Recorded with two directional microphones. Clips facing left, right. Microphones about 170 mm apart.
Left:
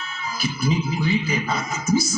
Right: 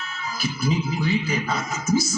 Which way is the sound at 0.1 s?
15° left (ahead or behind).